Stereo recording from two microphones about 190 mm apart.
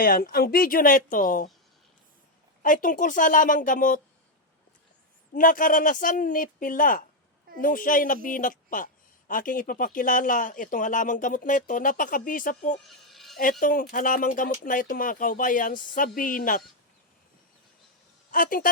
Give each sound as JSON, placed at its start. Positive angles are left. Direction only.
{"t": 0.0, "sound": "a woman's voice", "side_deg": 50}
{"t": 2.6, "sound": "a woman's voice", "side_deg": 45}
{"t": 5.3, "sound": "a woman's voice", "side_deg": 45}
{"t": 12.9, "sound": "music", "side_deg": 0}
{"t": 13.3, "sound": "a woman's voice", "side_deg": 50}
{"t": 18.3, "sound": "a woman's voice", "side_deg": 50}